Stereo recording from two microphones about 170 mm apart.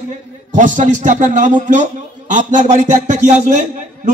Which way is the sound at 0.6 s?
45° right (ahead or behind).